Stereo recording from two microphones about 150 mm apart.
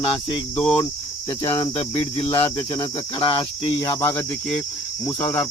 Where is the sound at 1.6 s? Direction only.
40° left (ahead or behind).